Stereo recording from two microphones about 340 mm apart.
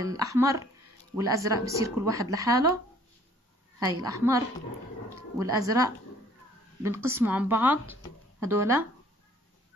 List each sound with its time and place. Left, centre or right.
0.0 s speech: centre
3.8 s speech: centre
5.4 s speech: centre